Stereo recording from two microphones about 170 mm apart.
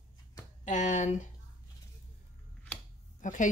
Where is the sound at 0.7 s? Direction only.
45° left (ahead or behind).